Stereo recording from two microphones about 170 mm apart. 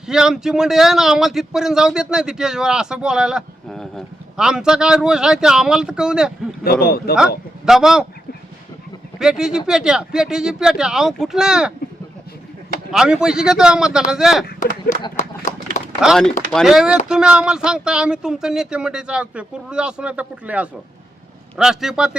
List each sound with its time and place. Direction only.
0.1 s speech: 5° right (ahead or behind)
6.7 s speech: 65° left (ahead or behind)
7.2 s a man's voice: 5° right (ahead or behind)
9.1 s speech: 5° right (ahead or behind)
12.9 s speech: 5° right (ahead or behind)
14.4 s speech: 55° left (ahead or behind)
15.1 s run: 45° left (ahead or behind)
16.0 s speech: centre (ahead or behind)